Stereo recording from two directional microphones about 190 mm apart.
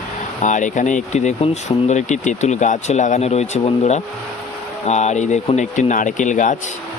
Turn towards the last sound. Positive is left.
turn(degrees=40)  # may be behind; listen again after turning